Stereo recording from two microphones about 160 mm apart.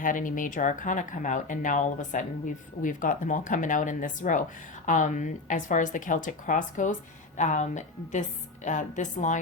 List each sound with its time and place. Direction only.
0.0 s speech: 55° left (ahead or behind)